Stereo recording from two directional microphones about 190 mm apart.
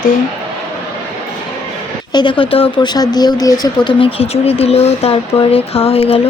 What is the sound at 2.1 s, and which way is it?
Speech, 25° left (ahead or behind).